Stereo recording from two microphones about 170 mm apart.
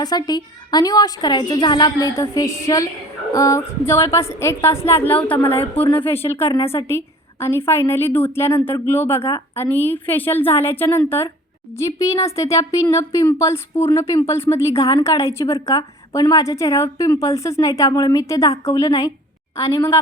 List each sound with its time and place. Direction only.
0.0 s a woman's voice: 25° left (ahead or behind)